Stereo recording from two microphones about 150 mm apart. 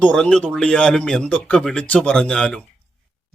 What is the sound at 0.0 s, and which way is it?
Speech, 10° left (ahead or behind).